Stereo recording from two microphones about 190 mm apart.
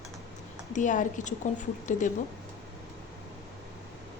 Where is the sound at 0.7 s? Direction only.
40° left (ahead or behind).